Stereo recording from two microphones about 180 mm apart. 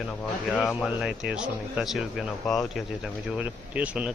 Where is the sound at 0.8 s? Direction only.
5° right (ahead or behind).